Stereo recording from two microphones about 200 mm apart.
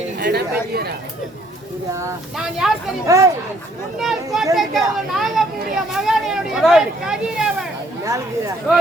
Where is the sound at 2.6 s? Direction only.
Centre (ahead or behind).